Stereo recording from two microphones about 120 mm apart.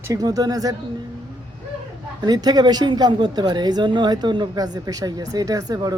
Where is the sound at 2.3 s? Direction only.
35° right (ahead or behind).